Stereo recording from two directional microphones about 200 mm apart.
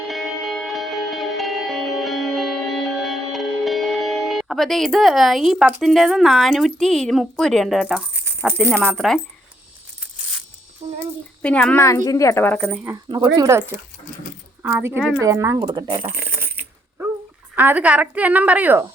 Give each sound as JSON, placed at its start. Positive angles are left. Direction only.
{"t": 0.1, "sound": "music", "side_deg": 0}
{"t": 8.4, "sound": "speech", "side_deg": 0}
{"t": 8.6, "sound": "a woman's voice", "side_deg": -10}
{"t": 9.0, "sound": "speech", "side_deg": 0}
{"t": 11.4, "sound": "a woman's voice", "side_deg": 5}
{"t": 12.6, "sound": "a woman's voice", "side_deg": -10}
{"t": 14.9, "sound": "speech", "side_deg": 5}
{"t": 15.2, "sound": "a woman's voice", "side_deg": -15}
{"t": 16.0, "sound": "coin", "side_deg": -10}
{"t": 17.5, "sound": "a woman's voice", "side_deg": -10}